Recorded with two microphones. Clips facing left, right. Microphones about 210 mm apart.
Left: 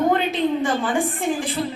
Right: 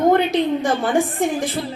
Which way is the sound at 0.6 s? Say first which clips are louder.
Right 3 dB; 40° right (ahead or behind).